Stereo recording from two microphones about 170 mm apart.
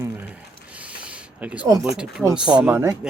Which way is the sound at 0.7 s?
10° right (ahead or behind).